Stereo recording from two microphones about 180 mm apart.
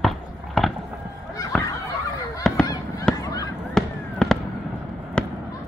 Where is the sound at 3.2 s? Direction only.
20° left (ahead or behind).